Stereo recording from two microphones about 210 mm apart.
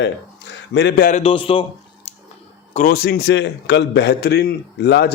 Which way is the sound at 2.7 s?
40° left (ahead or behind).